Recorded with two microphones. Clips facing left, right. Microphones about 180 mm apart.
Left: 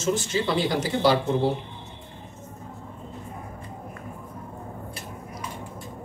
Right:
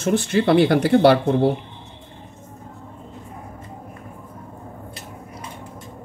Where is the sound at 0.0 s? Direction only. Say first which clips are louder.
Right 6 dB; 60° right (ahead or behind).